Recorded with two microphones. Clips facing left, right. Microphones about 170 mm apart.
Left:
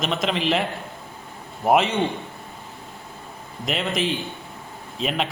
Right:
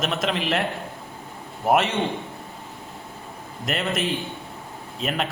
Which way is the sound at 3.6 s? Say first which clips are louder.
Left 1 dB; centre (ahead or behind).